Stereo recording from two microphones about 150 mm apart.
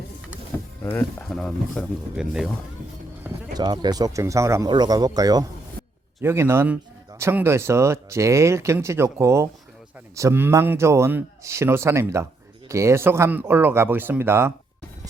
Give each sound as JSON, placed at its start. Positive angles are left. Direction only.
{"t": 0.8, "sound": "speech", "side_deg": 20}
{"t": 1.3, "sound": "speech", "side_deg": 5}
{"t": 3.5, "sound": "speech", "side_deg": -30}